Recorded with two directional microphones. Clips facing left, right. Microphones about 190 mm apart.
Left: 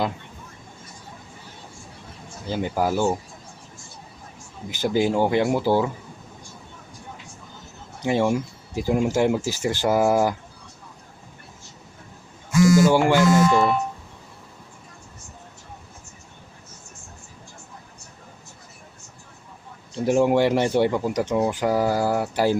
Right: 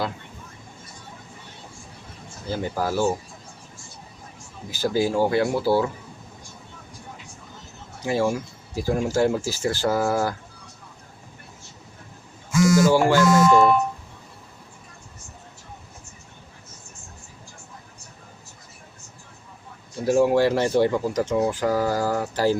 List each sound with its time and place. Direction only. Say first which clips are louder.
2.5 s speech: left 2 dB; 15° left (ahead or behind)
4.7 s speech: left 1 dB; 20° left (ahead or behind)
8.0 s speech: left 2 dB; 20° left (ahead or behind)
12.9 s speech: even; 15° left (ahead or behind)
13.5 s speech: right 3 dB; 45° right (ahead or behind)
20.1 s speech: even; 20° left (ahead or behind)